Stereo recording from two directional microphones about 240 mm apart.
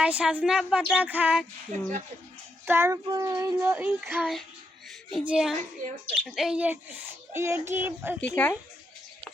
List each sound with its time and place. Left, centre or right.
0.0 s speech: centre
2.6 s child singing: centre
5.1 s speech: centre
7.3 s child singing: centre
8.2 s speech: centre